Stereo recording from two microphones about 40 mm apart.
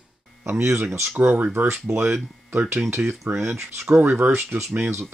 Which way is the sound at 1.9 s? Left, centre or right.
Right.